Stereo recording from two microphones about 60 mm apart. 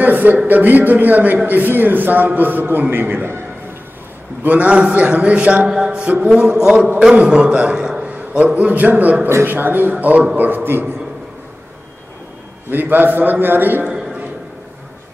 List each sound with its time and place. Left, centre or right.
0.0 s a man's voice: right
4.4 s a man's voice: right
5.7 s music: centre
7.0 s a man's voice: centre
9.3 s a man's voice: right
12.7 s a man's voice: right
13.8 s a sound: centre